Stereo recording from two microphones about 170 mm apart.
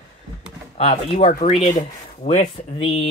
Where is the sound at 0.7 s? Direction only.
35° left (ahead or behind).